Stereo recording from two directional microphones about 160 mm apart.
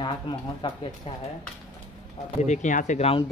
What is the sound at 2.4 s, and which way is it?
Speech, 50° left (ahead or behind).